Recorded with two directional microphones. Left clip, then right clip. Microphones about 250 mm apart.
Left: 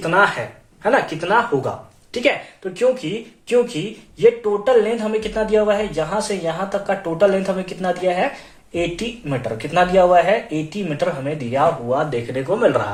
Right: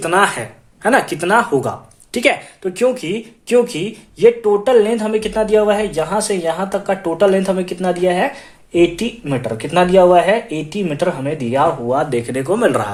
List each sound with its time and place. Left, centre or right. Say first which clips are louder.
0.0 s speech: right 2 dB; right
2.7 s speech: right 1 dB; right